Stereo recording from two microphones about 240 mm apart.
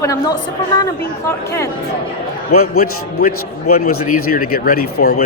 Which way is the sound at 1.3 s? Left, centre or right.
Centre.